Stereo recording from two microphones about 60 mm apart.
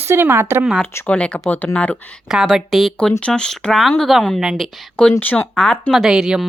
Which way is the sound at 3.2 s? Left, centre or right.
Centre.